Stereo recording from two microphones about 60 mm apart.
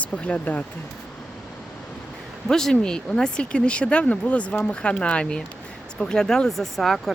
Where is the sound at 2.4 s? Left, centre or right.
Centre.